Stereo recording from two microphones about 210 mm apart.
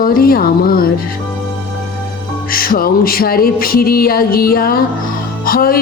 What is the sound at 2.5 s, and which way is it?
Speech, 45° left (ahead or behind).